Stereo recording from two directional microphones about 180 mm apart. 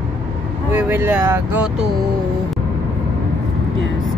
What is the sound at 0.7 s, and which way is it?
Speech, 10° right (ahead or behind).